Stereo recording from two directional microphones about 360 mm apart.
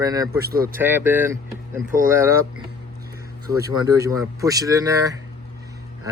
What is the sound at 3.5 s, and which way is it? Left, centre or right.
Speech, centre.